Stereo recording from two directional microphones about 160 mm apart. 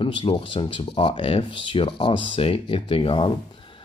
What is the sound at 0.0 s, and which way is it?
Speech, 30° left (ahead or behind).